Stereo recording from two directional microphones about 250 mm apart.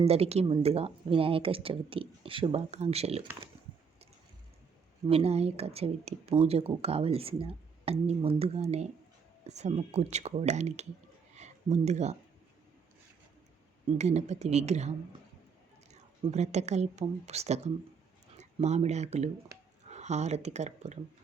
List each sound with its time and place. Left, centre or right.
0.0 s speech: right
5.0 s speech: right
11.3 s a sound: right
14.0 s speech: right